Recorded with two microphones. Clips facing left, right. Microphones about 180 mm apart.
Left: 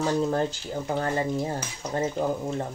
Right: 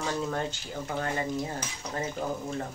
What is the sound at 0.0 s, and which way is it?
Speech, 35° left (ahead or behind).